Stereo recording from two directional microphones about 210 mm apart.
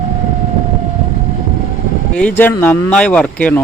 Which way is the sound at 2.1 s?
5° left (ahead or behind).